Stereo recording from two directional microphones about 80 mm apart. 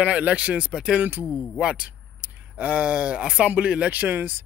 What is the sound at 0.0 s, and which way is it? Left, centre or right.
Speech, centre.